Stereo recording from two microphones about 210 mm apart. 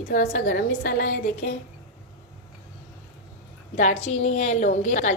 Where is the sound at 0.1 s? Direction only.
40° left (ahead or behind).